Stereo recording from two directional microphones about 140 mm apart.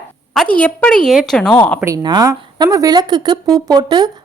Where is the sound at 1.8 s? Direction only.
25° right (ahead or behind).